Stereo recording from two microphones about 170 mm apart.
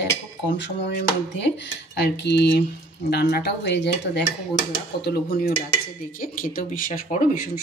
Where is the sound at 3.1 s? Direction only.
70° left (ahead or behind); by 4.2 s 90° left.